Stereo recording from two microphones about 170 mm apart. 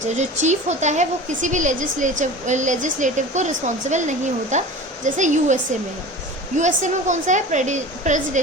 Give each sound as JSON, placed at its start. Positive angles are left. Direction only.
{"t": 0.0, "sound": "a woman's voice", "side_deg": -45}
{"t": 6.6, "sound": "a woman's voice", "side_deg": -45}